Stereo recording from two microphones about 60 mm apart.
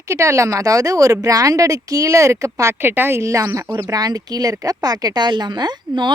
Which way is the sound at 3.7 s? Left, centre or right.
Right.